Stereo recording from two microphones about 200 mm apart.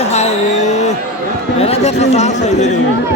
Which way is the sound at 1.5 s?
30° left (ahead or behind).